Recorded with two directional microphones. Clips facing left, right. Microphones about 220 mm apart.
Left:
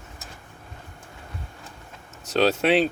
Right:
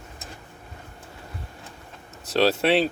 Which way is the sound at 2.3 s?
Centre (ahead or behind).